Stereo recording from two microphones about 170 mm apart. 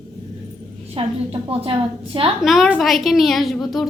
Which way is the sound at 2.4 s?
Centre (ahead or behind).